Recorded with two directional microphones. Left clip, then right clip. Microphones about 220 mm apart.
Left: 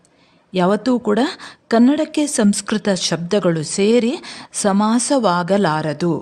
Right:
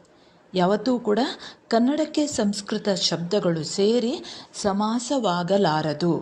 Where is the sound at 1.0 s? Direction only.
30° left (ahead or behind).